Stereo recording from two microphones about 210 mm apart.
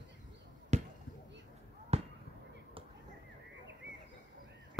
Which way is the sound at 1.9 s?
30° right (ahead or behind).